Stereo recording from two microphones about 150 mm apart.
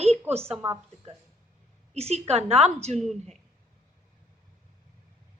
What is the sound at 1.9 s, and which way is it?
Speech, 45° right (ahead or behind).